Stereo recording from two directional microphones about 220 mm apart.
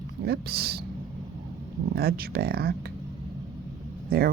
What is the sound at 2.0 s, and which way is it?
Speech, 45° right (ahead or behind).